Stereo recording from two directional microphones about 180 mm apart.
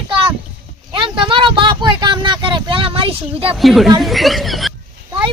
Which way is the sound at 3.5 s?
Centre (ahead or behind).